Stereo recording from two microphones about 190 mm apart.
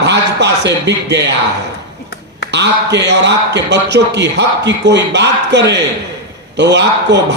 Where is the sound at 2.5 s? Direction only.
65° right (ahead or behind).